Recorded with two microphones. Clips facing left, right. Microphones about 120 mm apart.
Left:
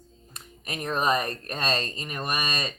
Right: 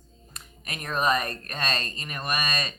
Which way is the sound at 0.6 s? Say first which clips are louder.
Even; 25° left (ahead or behind).